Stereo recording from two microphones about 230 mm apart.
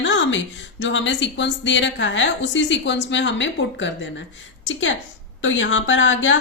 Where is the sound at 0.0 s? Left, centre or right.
Left.